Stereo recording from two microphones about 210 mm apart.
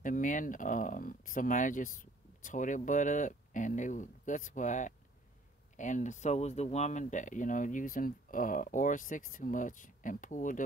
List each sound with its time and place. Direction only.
0.0 s speech: 40° left (ahead or behind)